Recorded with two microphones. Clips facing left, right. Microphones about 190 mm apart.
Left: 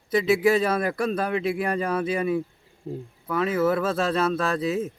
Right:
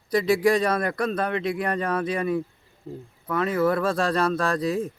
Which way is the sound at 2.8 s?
20° left (ahead or behind).